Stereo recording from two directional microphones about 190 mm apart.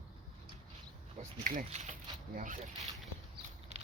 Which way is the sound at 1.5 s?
40° right (ahead or behind).